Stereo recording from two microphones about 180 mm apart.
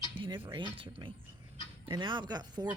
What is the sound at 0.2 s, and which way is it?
Speech, 25° right (ahead or behind).